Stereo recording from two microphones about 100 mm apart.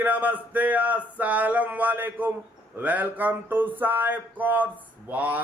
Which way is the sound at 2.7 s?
15° right (ahead or behind).